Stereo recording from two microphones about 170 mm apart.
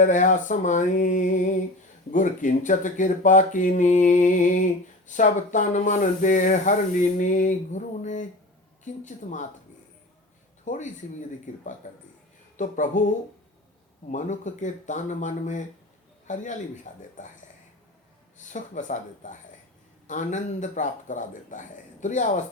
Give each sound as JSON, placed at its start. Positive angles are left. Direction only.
{"t": 0.0, "sound": "speech", "side_deg": 45}
{"t": 10.7, "sound": "a man's voice", "side_deg": 50}
{"t": 18.3, "sound": "speech", "side_deg": 45}